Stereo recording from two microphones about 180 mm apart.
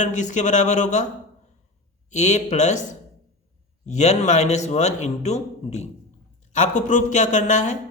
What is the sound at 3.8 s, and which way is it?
A man's voice, 40° left (ahead or behind).